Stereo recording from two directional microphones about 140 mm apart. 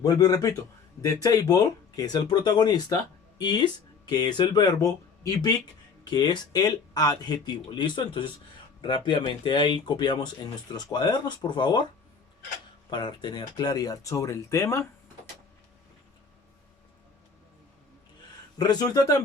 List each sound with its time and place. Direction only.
0.0 s speech: 25° left (ahead or behind)
12.9 s speech: 30° left (ahead or behind)
18.5 s speech: 30° left (ahead or behind)